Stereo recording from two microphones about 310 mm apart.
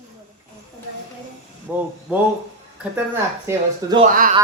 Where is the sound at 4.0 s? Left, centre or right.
Right.